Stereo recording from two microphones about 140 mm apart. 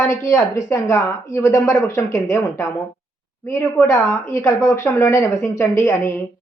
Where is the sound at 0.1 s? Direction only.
20° left (ahead or behind).